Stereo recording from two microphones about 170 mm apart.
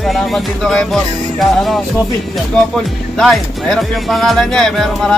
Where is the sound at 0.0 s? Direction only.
Centre (ahead or behind).